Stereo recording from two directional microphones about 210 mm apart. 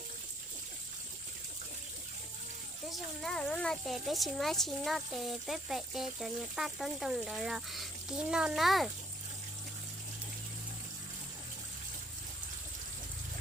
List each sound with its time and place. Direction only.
2.9 s speech: centre (ahead or behind)